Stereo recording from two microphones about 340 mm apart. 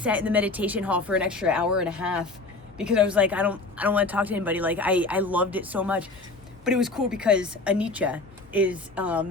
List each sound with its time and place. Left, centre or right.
0.0 s a woman's voice: centre